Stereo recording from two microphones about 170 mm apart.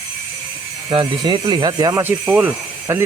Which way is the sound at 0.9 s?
25° right (ahead or behind).